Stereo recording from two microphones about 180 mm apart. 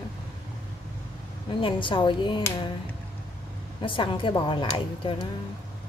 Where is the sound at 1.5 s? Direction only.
25° left (ahead or behind).